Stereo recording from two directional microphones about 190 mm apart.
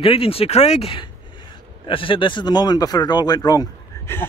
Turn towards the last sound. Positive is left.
turn(degrees=15)  # may be behind; listen again after turning